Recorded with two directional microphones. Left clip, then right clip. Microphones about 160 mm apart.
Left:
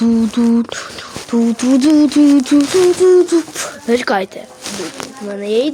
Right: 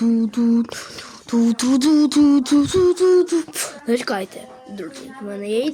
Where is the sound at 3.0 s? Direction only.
10° left (ahead or behind).